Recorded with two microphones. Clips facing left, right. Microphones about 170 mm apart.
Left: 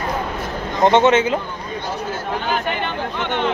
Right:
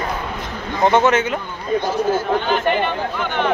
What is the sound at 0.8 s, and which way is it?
Speech, 25° left (ahead or behind).